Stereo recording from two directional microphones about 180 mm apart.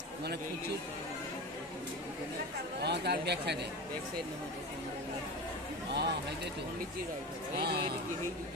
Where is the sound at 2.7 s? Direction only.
65° right (ahead or behind).